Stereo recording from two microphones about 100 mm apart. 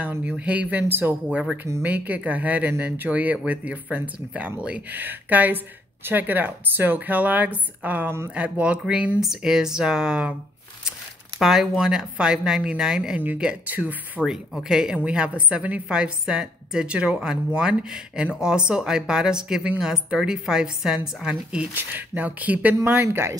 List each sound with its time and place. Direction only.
0.0 s a woman's voice: 15° right (ahead or behind)
14.2 s a woman's voice: 5° right (ahead or behind); by 23.3 s 20° right (ahead or behind)